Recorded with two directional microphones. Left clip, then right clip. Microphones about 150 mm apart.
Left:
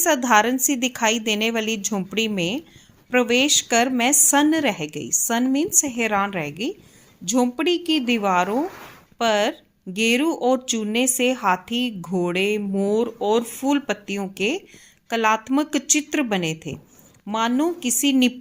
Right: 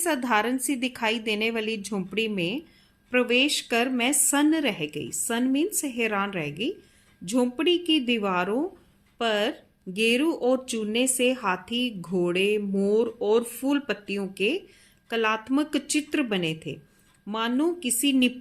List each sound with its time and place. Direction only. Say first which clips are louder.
0.0 s speech: left 7 dB; 30° left (ahead or behind)